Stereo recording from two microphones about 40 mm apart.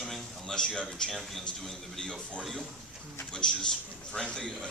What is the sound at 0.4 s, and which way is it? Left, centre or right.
Speech, centre.